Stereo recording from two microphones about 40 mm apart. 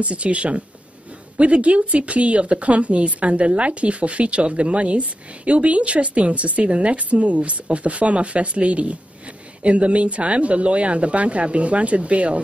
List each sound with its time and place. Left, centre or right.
0.0 s a woman's voice: right